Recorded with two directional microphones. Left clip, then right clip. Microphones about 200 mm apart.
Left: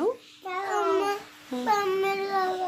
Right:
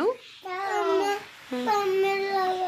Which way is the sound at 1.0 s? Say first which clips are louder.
Right 1 dB; centre (ahead or behind).